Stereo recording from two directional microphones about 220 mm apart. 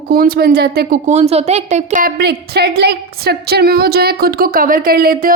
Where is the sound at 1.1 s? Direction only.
30° right (ahead or behind).